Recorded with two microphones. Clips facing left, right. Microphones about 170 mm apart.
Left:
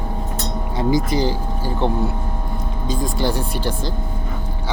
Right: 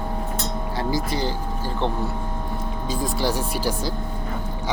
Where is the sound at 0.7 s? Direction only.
20° left (ahead or behind).